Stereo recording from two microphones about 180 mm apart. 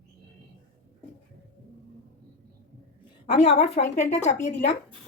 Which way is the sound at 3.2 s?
35° left (ahead or behind).